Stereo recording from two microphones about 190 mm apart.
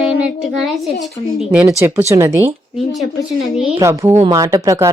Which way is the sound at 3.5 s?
5° right (ahead or behind).